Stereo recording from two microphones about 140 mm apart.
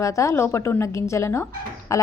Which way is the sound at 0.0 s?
20° left (ahead or behind).